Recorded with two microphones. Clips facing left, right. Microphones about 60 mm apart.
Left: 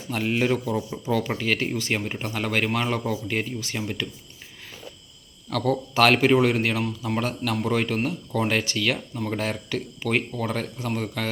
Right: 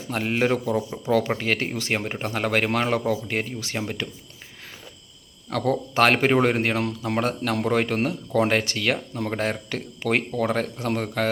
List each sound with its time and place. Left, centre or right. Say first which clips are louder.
0.1 s a man's voice: right 1 dB; right
5.5 s a man's voice: right 1 dB; right